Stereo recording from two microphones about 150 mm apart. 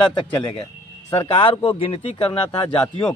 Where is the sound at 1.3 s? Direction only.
35° left (ahead or behind).